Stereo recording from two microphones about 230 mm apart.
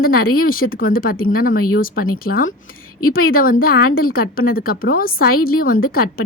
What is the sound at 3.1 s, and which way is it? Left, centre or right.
A woman's voice, left.